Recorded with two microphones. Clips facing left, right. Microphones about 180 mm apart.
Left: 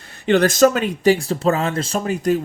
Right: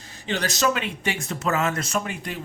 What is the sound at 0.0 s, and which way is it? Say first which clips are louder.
Speech: left 12 dB; 60° left (ahead or behind).